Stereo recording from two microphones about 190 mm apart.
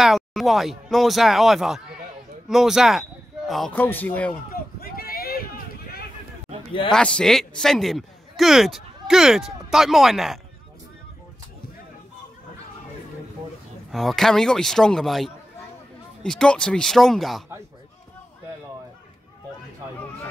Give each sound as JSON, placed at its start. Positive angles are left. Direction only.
{"t": 0.0, "sound": "speech", "side_deg": 0}
{"t": 4.5, "sound": "a sound", "side_deg": 50}
{"t": 6.9, "sound": "a man's voice", "side_deg": 5}
{"t": 13.9, "sound": "speech", "side_deg": 0}